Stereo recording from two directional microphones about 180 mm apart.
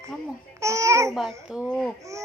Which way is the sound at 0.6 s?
15° right (ahead or behind).